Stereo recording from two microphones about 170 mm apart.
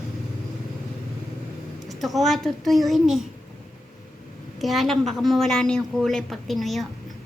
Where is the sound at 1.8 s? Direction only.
Centre (ahead or behind).